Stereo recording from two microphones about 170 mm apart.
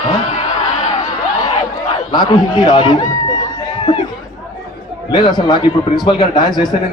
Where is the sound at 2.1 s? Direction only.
25° left (ahead or behind).